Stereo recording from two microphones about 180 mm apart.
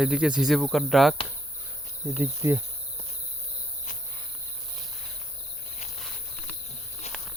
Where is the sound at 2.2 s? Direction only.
15° right (ahead or behind).